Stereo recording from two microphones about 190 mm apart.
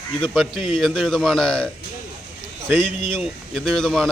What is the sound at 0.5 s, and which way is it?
Speech, 25° left (ahead or behind).